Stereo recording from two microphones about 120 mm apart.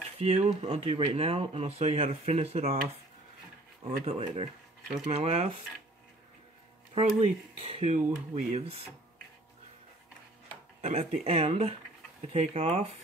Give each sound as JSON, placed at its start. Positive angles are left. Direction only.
{"t": 0.2, "sound": "speech", "side_deg": -65}
{"t": 3.8, "sound": "speech", "side_deg": -60}
{"t": 7.0, "sound": "speech", "side_deg": -60}
{"t": 10.8, "sound": "speech", "side_deg": -75}